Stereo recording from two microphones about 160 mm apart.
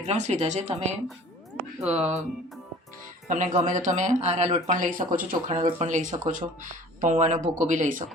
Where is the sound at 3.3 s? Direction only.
50° right (ahead or behind).